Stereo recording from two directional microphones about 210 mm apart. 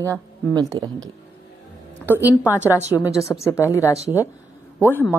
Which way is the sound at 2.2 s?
10° left (ahead or behind).